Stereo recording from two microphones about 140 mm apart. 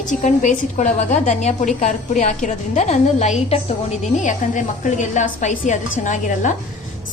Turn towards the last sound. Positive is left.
turn(degrees=65)  # may be behind; listen again after turning